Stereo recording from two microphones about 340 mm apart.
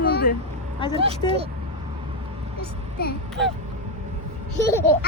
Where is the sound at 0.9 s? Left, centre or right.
Centre.